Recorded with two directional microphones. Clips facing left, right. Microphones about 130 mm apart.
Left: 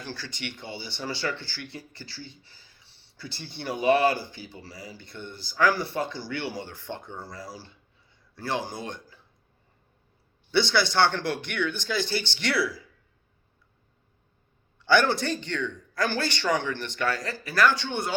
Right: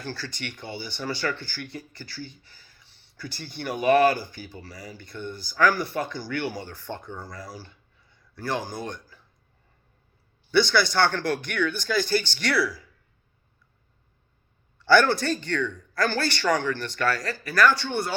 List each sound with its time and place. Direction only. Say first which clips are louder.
0.0 s speech: right 2 dB; 20° left (ahead or behind)
10.5 s speech: right 2 dB; 25° left (ahead or behind)
14.8 s speech: right 3 dB; 20° left (ahead or behind)